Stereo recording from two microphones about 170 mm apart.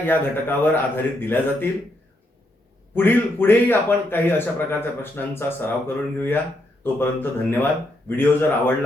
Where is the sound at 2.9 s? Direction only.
10° left (ahead or behind).